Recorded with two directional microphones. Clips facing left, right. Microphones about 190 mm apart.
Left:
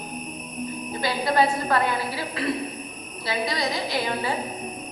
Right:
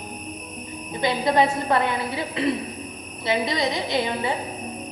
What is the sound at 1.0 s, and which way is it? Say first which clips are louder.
A woman's voice: right 2 dB; 20° right (ahead or behind).